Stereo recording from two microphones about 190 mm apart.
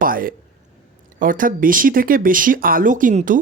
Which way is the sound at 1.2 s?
45° right (ahead or behind).